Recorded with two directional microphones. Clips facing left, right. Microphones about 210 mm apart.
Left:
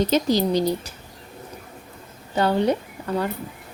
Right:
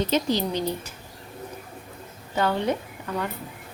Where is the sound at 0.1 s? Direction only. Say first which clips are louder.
Left 4 dB; 40° left (ahead or behind).